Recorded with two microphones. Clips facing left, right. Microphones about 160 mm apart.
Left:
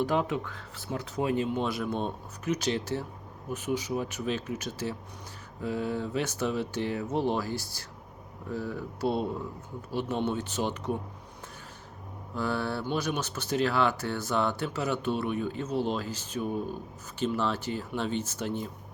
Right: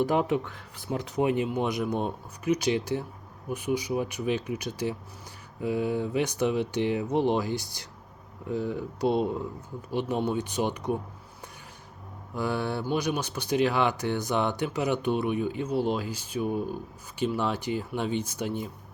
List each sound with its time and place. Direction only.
0.0 s speech: 15° right (ahead or behind)
12.4 s speech: 15° right (ahead or behind)